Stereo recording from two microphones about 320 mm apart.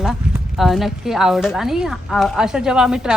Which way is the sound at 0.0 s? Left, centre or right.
Centre.